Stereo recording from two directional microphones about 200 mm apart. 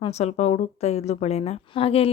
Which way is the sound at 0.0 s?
35° left (ahead or behind).